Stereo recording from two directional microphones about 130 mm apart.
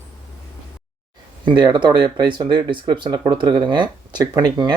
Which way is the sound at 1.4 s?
35° right (ahead or behind).